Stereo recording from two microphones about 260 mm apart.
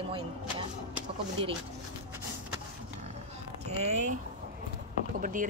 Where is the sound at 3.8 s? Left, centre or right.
Right.